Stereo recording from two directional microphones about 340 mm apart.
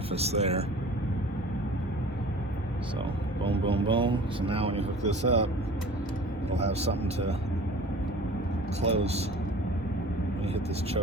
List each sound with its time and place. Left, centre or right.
0.1 s speech: centre
3.4 s speech: centre
6.6 s speech: centre
8.8 s speech: centre